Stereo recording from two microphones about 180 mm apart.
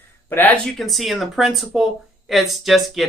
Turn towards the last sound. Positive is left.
turn(degrees=0)  # may be behind; listen again after turning